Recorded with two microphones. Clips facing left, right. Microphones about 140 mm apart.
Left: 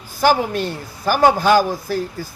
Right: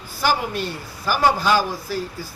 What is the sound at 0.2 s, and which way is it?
A man's voice, 50° left (ahead or behind).